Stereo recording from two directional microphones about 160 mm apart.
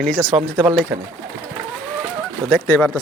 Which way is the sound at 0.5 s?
15° right (ahead or behind).